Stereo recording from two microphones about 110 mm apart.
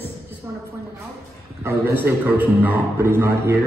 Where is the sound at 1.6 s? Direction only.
20° right (ahead or behind).